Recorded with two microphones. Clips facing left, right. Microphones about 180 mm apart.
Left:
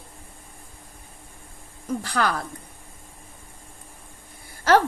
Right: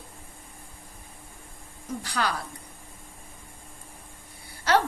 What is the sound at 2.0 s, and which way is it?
Speech, 55° left (ahead or behind).